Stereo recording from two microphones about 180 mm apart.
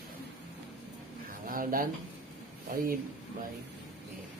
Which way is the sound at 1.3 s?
50° right (ahead or behind).